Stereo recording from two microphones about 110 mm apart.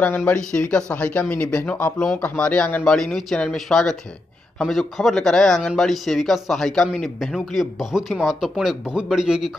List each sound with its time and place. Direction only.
0.0 s speech: 15° left (ahead or behind); by 9.5 s 5° right (ahead or behind)